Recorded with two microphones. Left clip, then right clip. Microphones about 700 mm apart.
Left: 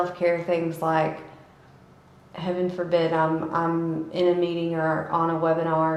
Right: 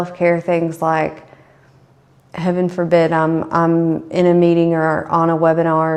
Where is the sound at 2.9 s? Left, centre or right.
Right.